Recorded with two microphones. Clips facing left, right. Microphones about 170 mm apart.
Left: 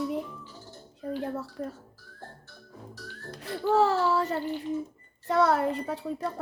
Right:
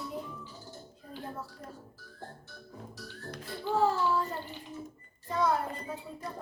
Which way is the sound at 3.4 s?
75° left (ahead or behind).